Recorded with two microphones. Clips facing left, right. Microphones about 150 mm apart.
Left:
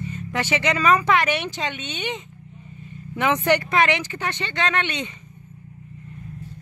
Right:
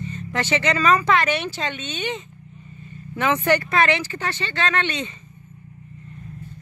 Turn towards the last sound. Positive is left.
turn(degrees=15)  # may be behind; listen again after turning